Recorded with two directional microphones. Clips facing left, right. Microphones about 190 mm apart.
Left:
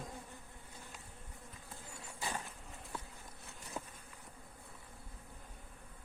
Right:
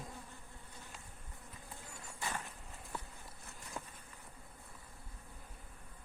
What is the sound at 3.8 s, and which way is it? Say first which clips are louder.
Insect: left 2 dB; 20° left (ahead or behind).